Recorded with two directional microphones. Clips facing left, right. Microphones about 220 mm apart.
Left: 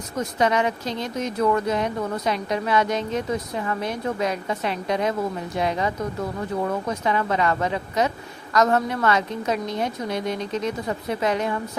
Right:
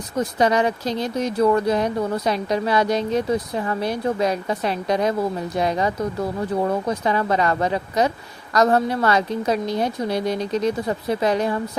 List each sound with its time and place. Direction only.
0.2 s speech: 35° right (ahead or behind)